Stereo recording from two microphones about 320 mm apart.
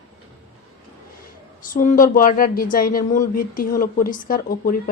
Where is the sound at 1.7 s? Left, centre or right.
Left.